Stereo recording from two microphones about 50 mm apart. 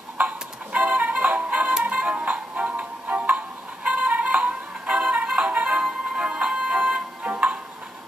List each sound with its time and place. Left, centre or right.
0.2 s music: right